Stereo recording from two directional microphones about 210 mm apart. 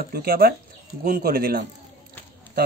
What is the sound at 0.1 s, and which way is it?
Speech, 45° right (ahead or behind).